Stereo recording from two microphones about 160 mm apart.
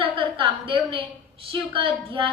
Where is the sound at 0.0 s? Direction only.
30° right (ahead or behind).